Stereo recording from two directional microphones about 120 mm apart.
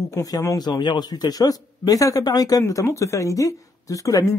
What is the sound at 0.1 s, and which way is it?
A man's voice, 25° left (ahead or behind).